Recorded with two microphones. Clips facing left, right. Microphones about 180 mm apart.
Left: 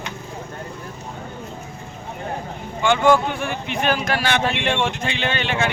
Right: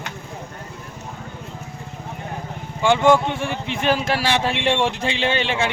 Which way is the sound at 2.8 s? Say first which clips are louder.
Right 1 dB; 30° right (ahead or behind).